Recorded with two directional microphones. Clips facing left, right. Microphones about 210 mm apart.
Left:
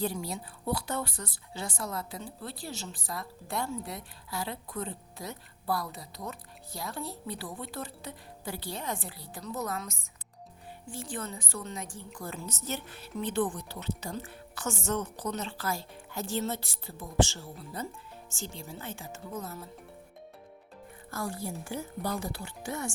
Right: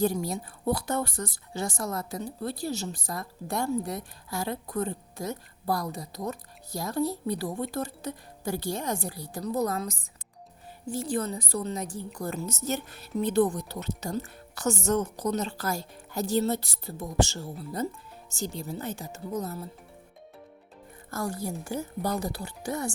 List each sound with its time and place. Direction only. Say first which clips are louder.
0.0 s a woman's voice: right 6 dB; 45° right (ahead or behind)
21.1 s a woman's voice: right 4 dB; 45° right (ahead or behind)